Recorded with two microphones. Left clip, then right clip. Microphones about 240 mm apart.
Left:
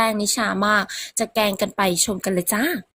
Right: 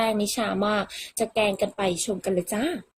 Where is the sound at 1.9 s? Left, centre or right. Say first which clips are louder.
Left 4 dB; left.